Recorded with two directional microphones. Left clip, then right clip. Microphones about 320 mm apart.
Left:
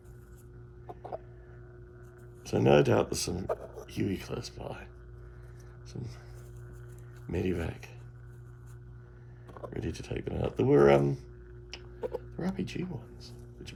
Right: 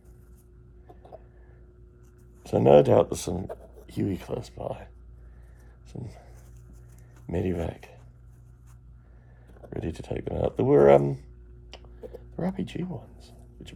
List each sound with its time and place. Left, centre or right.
2.4 s speech: centre
5.9 s speech: centre
7.3 s speech: centre
9.6 s speech: centre
12.4 s speech: centre